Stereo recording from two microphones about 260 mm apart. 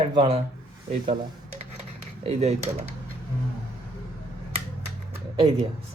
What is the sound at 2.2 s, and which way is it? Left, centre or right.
Speech, right.